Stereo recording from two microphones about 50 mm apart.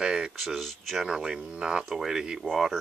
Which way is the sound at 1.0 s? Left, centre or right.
Centre.